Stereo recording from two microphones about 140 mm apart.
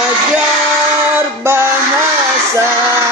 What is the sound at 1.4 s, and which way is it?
Music, 20° right (ahead or behind).